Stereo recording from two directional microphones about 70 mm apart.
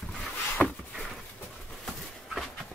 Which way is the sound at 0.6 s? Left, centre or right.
Centre.